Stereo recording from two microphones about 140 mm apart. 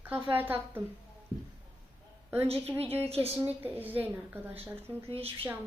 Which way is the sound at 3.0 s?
45° right (ahead or behind).